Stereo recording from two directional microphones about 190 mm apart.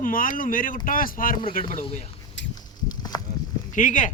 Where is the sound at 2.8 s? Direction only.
20° left (ahead or behind).